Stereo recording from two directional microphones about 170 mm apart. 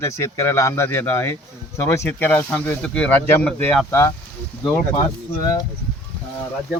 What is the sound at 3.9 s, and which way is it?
Speech, 15° left (ahead or behind).